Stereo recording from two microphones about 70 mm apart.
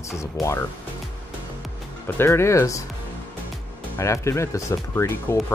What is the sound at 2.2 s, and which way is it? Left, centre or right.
Speech, left.